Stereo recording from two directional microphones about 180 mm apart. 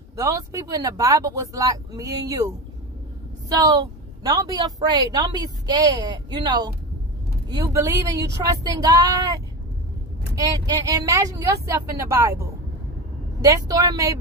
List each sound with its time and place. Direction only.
0.1 s a woman's voice: 15° right (ahead or behind)